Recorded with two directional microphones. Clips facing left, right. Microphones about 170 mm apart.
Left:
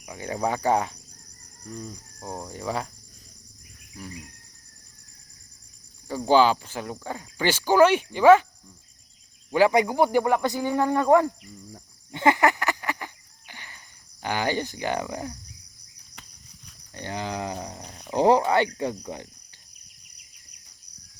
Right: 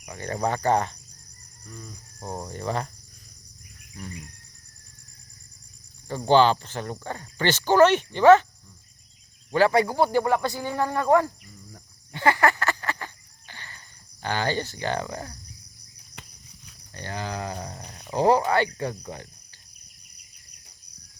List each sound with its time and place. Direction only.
0.0 s speech: 10° left (ahead or behind)
2.2 s speech: centre (ahead or behind)
6.1 s speech: 5° left (ahead or behind)
9.5 s speech: 15° left (ahead or behind)
11.7 s cricket: 20° left (ahead or behind)
16.9 s speech: 20° left (ahead or behind)
17.8 s speech: centre (ahead or behind)
18.1 s speech: 20° left (ahead or behind)